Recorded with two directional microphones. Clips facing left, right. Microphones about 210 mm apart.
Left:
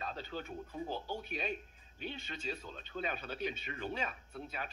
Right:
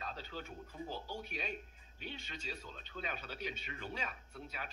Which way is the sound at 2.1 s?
55° left (ahead or behind).